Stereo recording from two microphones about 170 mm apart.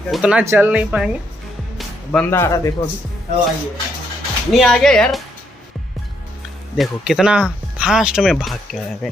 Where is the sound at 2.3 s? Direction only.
15° left (ahead or behind).